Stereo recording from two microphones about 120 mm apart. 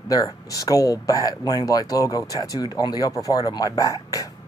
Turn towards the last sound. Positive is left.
turn(degrees=25)  # may be behind; listen again after turning